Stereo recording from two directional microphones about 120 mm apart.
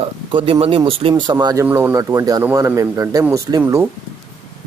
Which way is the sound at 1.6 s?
20° right (ahead or behind).